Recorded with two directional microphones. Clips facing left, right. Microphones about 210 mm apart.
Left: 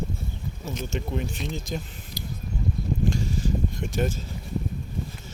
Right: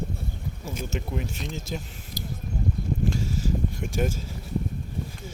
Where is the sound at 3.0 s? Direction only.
5° right (ahead or behind).